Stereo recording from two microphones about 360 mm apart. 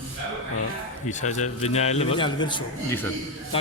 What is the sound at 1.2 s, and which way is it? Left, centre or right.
A man's voice, centre.